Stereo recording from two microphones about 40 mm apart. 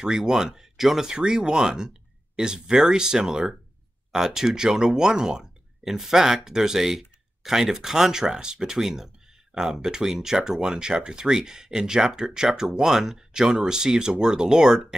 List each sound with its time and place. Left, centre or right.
0.0 s speech: centre